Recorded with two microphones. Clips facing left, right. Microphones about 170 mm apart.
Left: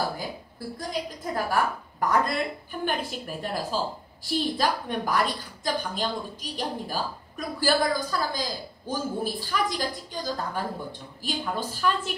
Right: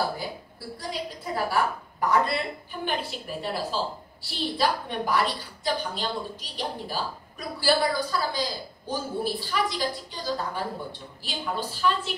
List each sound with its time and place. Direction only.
0.2 s a woman's voice: 45° left (ahead or behind)